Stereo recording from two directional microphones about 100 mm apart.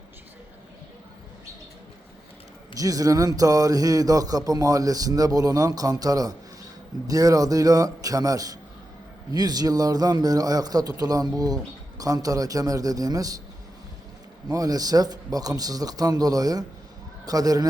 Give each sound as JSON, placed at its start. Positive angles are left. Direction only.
{"t": 2.7, "sound": "a man's voice", "side_deg": -35}
{"t": 14.5, "sound": "a man's voice", "side_deg": -35}